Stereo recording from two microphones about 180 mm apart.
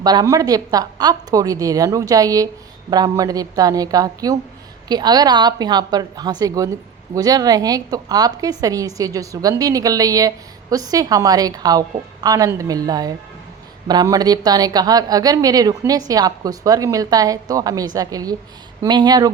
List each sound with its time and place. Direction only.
0.0 s a woman's voice: 20° right (ahead or behind)